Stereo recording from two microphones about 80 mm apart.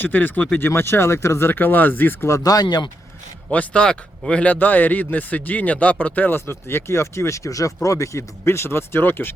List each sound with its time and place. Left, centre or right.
0.0 s speech: left
2.3 s speech: left
3.5 s speech: centre